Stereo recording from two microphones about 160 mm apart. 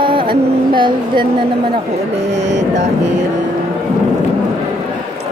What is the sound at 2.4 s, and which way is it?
Speech, 90° right.